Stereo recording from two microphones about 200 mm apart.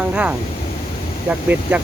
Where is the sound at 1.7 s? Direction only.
5° right (ahead or behind).